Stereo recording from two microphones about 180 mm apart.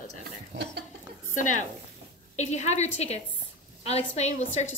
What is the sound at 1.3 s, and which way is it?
A woman's voice, 45° left (ahead or behind).